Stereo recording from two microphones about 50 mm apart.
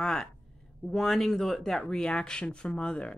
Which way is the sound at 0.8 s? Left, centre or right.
Centre.